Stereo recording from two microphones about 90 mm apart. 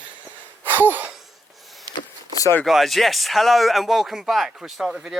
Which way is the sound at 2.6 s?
Centre (ahead or behind).